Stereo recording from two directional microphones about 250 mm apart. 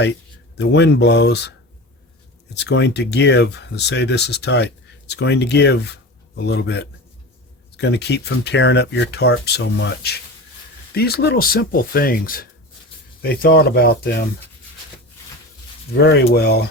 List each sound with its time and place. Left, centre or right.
0.5 s speech: left
2.6 s speech: left
16.0 s speech: left